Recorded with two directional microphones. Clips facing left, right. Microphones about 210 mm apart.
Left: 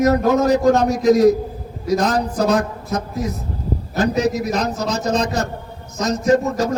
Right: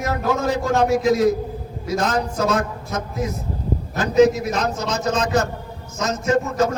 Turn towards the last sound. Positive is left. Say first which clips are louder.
# left 3 dB
turn(degrees=35)  # may be behind; listen again after turning